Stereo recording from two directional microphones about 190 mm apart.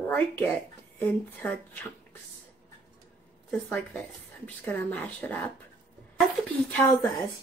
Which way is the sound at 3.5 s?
10° left (ahead or behind).